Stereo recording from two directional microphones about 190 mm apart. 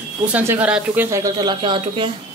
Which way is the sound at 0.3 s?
10° right (ahead or behind).